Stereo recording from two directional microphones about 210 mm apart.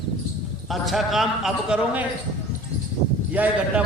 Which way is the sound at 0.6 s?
Centre (ahead or behind).